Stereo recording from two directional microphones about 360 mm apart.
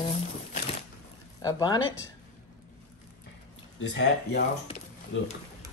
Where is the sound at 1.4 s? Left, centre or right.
Centre.